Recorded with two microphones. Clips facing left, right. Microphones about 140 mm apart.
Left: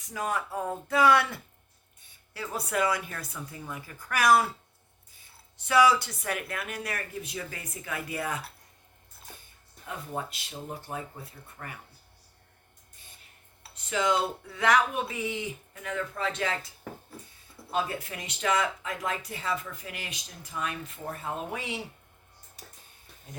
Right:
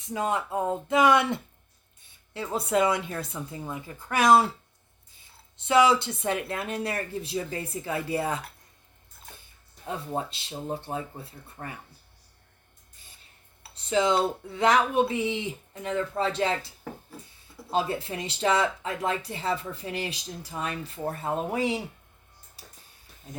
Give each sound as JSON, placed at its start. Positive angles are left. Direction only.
{"t": 0.0, "sound": "speech", "side_deg": -25}
{"t": 5.5, "sound": "speech", "side_deg": -25}
{"t": 9.8, "sound": "speech", "side_deg": -30}
{"t": 13.7, "sound": "speech", "side_deg": -30}